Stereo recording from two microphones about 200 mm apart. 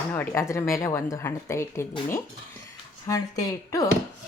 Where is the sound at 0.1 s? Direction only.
10° left (ahead or behind).